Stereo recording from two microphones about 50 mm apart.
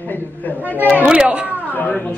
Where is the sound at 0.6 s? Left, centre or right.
Right.